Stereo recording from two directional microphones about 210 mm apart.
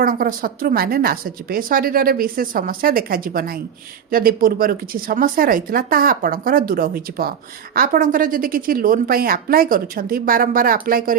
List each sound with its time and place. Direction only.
0.0 s a woman's voice: 40° right (ahead or behind)